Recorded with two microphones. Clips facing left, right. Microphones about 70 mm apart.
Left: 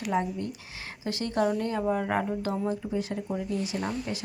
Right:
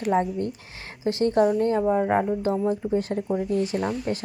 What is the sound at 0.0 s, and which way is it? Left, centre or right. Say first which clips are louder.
Speech: right 5 dB; right.